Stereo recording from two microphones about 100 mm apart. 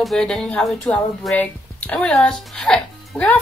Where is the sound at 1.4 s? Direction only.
15° left (ahead or behind).